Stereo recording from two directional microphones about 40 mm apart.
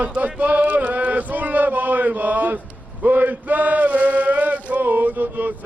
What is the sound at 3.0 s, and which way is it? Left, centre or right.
Chant, right.